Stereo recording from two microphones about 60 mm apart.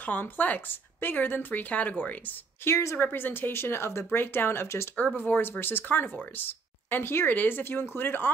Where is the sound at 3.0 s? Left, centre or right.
Left.